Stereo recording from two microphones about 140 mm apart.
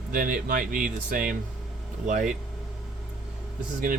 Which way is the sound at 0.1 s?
80° right.